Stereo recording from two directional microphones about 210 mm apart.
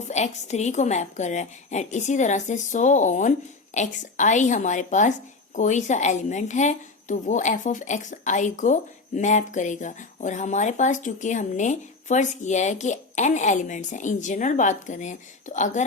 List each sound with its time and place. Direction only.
0.1 s a woman's voice: 35° left (ahead or behind)